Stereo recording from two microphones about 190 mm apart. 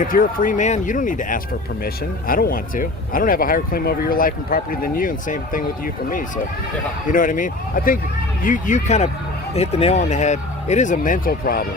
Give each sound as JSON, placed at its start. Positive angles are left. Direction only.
{"t": 0.0, "sound": "speech", "side_deg": 45}